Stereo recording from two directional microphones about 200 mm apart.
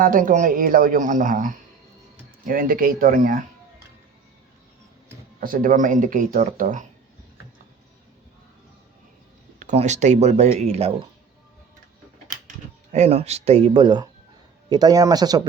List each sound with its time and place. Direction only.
0.0 s speech: 40° right (ahead or behind)
5.4 s speech: 45° right (ahead or behind)
9.6 s speech: 35° right (ahead or behind)
12.9 s a man's voice: 35° right (ahead or behind)